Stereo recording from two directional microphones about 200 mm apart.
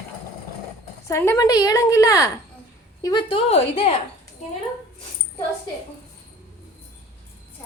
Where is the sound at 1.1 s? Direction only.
15° left (ahead or behind); by 4.0 s 30° left (ahead or behind).